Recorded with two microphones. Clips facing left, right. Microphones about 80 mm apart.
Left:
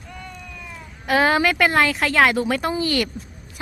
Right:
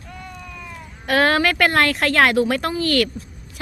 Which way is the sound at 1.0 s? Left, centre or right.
Centre.